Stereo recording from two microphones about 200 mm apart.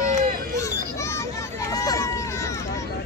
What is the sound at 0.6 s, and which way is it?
Hubbub, 15° left (ahead or behind).